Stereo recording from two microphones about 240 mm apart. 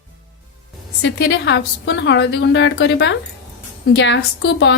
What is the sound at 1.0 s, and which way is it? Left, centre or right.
A woman's voice, left.